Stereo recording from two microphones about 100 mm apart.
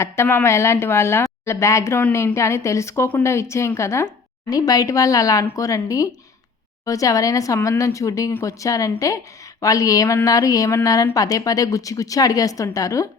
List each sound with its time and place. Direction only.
0.0 s a woman's voice: 25° left (ahead or behind)